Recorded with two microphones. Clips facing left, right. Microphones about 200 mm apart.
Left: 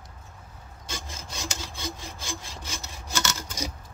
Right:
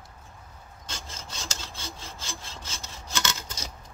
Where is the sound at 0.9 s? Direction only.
15° left (ahead or behind).